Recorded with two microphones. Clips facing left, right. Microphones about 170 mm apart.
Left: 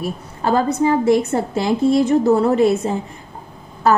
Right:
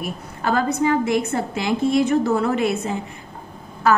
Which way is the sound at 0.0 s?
30° left (ahead or behind).